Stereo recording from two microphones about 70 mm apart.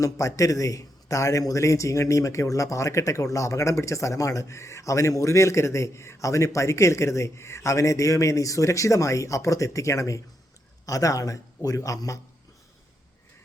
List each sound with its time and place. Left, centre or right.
0.0 s a man's voice: left